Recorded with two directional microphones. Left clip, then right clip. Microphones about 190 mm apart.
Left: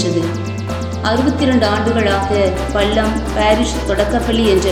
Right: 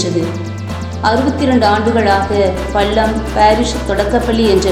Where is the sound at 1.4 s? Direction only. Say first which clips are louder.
Right 5 dB; 10° right (ahead or behind).